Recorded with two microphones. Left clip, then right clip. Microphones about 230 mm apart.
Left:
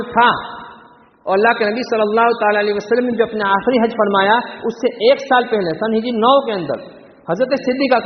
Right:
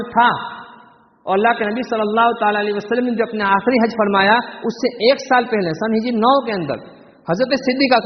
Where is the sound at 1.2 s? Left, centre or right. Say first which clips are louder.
Left 2 dB; right.